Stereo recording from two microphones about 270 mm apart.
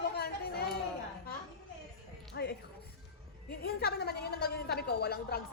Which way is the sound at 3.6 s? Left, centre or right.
Left.